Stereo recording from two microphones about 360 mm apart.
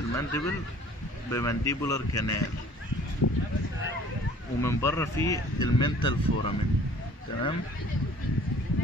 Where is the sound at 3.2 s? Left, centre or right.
Left.